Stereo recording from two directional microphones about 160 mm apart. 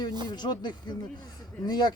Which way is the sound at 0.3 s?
25° left (ahead or behind).